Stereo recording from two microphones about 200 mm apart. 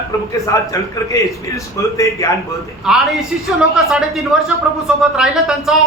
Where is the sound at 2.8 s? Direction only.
Centre (ahead or behind).